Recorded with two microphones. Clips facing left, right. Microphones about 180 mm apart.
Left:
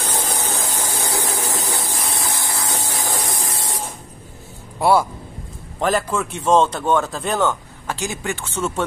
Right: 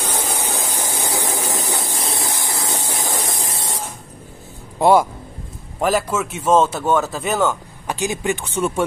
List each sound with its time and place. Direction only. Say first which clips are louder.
0.3 s a sound: right 1 dB; 15° right (ahead or behind)
1.0 s spray: right 1 dB; 20° right (ahead or behind)
1.7 s a sound: right 1 dB; 25° right (ahead or behind)
4.7 s speech: right 3 dB; 20° right (ahead or behind)
5.8 s speech: right 1 dB; 5° right (ahead or behind)
7.8 s speech: right 4 dB; 15° right (ahead or behind)